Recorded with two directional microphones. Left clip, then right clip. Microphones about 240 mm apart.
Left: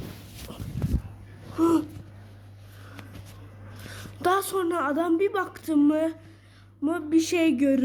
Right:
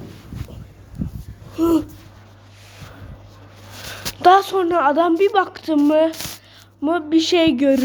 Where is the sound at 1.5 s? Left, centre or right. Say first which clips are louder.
Right 5 dB; centre.